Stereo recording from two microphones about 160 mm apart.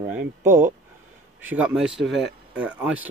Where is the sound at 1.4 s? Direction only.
5° right (ahead or behind).